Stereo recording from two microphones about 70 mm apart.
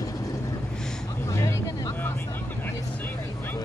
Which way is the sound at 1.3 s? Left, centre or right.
Left.